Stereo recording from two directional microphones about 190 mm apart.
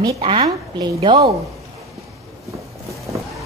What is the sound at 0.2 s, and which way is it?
A woman's voice, 25° right (ahead or behind).